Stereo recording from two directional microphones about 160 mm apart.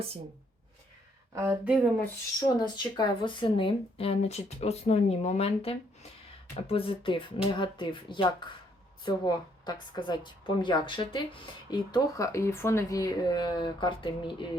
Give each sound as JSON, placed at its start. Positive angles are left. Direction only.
{"t": 1.3, "sound": "speech", "side_deg": -15}
{"t": 2.4, "sound": "speech", "side_deg": 25}